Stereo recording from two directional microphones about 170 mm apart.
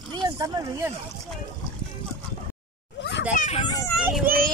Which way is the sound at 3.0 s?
90° left.